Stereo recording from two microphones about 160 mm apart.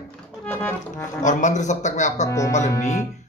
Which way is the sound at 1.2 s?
50° left (ahead or behind).